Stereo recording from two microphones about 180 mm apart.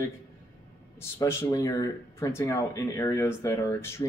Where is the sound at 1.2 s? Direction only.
15° left (ahead or behind).